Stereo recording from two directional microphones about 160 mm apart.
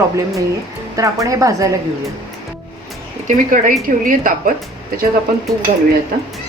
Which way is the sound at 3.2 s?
55° right (ahead or behind).